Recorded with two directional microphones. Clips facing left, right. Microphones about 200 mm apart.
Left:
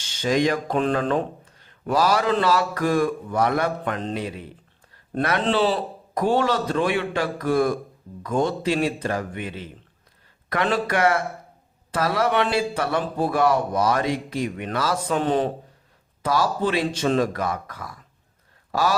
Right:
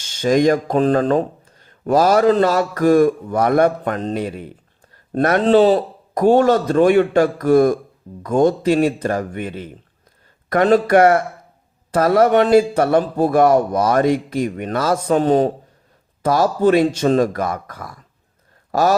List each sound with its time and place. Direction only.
0.2 s speech: 45° right (ahead or behind)